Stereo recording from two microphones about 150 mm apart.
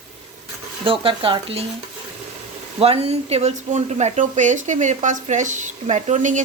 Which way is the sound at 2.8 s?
40° right (ahead or behind).